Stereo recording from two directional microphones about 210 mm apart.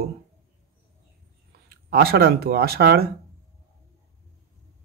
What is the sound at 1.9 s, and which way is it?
Speech, 50° right (ahead or behind).